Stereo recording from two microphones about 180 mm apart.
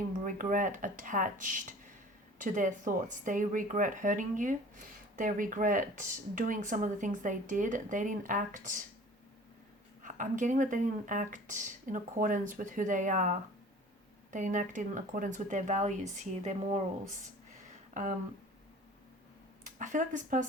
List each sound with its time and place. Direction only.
0.3 s speech: 50° right (ahead or behind)
10.0 s speech: 45° right (ahead or behind)
19.8 s speech: 45° right (ahead or behind)